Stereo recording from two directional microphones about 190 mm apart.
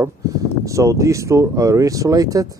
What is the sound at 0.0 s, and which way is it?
Speech, 15° right (ahead or behind).